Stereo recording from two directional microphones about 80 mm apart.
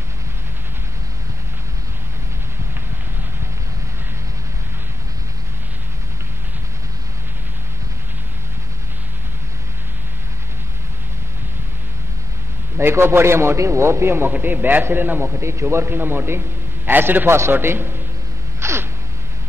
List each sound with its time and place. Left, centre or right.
12.7 s a man's voice: right
18.6 s sneeze: right